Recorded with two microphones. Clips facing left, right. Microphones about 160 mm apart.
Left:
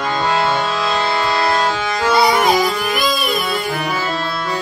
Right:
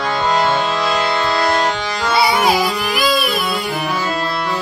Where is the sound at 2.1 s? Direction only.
5° right (ahead or behind).